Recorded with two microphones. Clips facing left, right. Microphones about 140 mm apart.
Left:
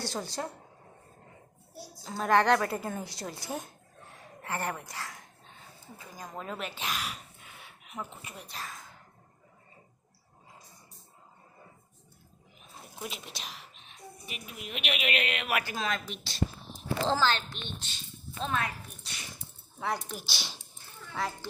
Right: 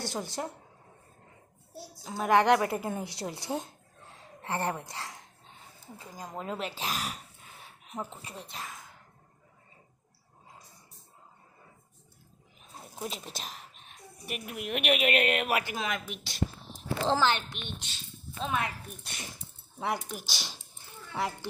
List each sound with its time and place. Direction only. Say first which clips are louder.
0.0 s a woman's voice: even; 15° right (ahead or behind)
2.0 s a woman's voice: right 1 dB; 15° right (ahead or behind)
4.4 s a sound: right 2 dB; 20° right (ahead or behind)
6.0 s speech: right 2 dB; 20° right (ahead or behind)
13.0 s a woman's voice: right 3 dB; 35° right (ahead or behind)
15.5 s speech: even; 20° right (ahead or behind)
19.1 s speech: right 1 dB; 50° right (ahead or behind)
19.8 s speech: right 1 dB; 15° right (ahead or behind)
20.3 s speech: even; centre (ahead or behind)
21.1 s speech: right 1 dB; 20° right (ahead or behind)